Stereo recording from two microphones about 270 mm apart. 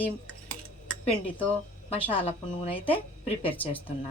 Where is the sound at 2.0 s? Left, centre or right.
Centre.